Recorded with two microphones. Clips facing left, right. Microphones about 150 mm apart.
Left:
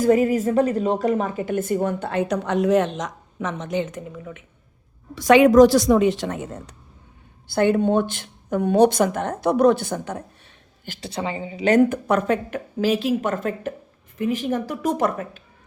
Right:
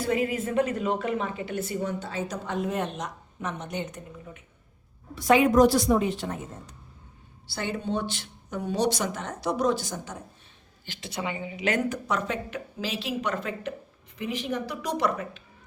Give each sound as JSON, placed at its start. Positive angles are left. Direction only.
{"t": 0.0, "sound": "a woman's voice", "side_deg": 40}
{"t": 7.4, "sound": "a woman's voice", "side_deg": 55}
{"t": 10.8, "sound": "a woman's voice", "side_deg": 45}
{"t": 11.1, "sound": "a woman's voice", "side_deg": 30}
{"t": 11.8, "sound": "a woman's voice", "side_deg": 55}